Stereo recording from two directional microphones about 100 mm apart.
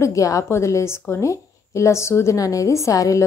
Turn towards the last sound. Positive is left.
turn(degrees=35)  # may be behind; listen again after turning